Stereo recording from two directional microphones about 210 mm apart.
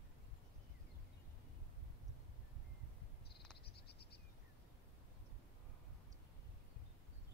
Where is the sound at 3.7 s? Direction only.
50° left (ahead or behind).